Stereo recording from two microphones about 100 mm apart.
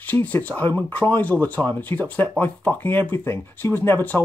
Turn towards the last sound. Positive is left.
turn(degrees=20)  # may be behind; listen again after turning